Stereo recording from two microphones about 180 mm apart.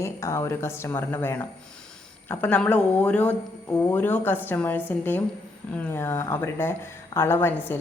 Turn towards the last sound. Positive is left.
turn(degrees=15)  # may be behind; listen again after turning